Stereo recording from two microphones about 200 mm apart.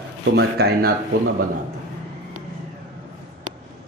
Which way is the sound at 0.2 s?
55° right (ahead or behind).